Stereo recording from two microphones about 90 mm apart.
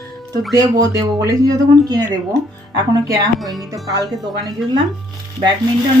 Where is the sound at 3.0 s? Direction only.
40° right (ahead or behind).